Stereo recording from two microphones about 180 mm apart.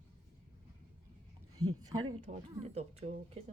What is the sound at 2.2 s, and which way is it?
Speech, 40° right (ahead or behind).